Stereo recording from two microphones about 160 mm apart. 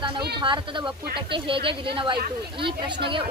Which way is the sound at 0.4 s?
30° right (ahead or behind).